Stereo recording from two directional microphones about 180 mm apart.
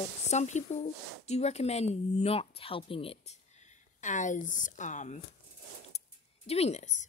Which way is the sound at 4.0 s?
45° left (ahead or behind).